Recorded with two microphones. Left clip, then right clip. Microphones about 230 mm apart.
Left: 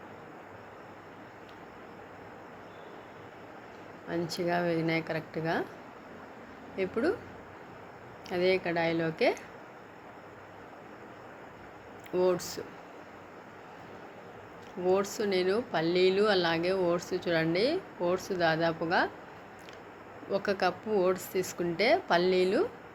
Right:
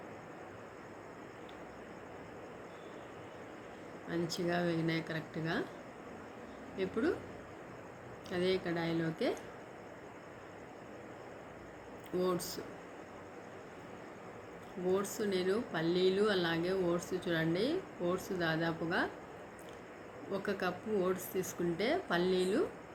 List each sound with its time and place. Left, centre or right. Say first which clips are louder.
4.1 s speech: left 5 dB; centre
8.3 s speech: left 6 dB; centre
12.1 s speech: left 7 dB; centre
14.9 s speech: left 5 dB; centre
20.3 s speech: left 8 dB; centre